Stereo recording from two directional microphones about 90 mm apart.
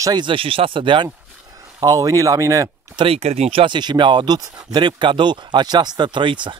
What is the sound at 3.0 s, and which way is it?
Speech, 90° right.